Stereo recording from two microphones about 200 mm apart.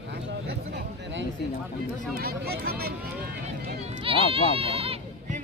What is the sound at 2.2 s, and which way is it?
Speech, 50° right (ahead or behind).